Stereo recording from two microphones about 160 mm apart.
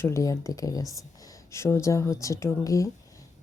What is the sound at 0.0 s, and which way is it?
Speech, 20° left (ahead or behind).